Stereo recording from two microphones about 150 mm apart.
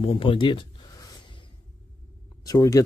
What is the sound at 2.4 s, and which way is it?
Speech, 25° left (ahead or behind).